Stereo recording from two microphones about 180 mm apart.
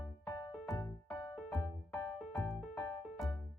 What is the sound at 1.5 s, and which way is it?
Music, centre (ahead or behind).